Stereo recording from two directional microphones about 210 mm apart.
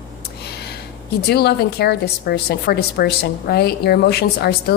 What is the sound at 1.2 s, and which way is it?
A woman's voice, 50° left (ahead or behind).